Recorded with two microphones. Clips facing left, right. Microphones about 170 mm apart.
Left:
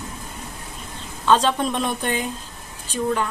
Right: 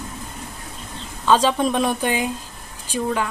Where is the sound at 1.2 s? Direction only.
5° right (ahead or behind).